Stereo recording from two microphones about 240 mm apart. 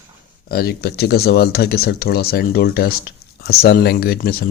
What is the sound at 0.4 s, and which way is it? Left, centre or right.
Speech, left.